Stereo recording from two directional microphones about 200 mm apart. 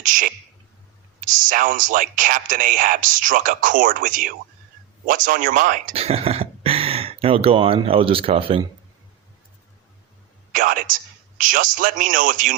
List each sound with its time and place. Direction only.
0.0 s speech: 40° right (ahead or behind)
10.5 s a man's voice: 45° right (ahead or behind)